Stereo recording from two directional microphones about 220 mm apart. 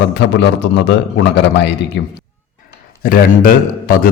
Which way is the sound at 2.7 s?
40° left (ahead or behind).